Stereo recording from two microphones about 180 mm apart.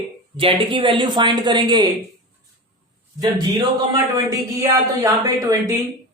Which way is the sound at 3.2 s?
25° right (ahead or behind).